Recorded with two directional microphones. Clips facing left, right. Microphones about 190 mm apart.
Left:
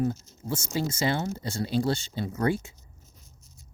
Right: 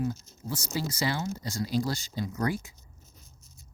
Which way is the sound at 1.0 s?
25° left (ahead or behind).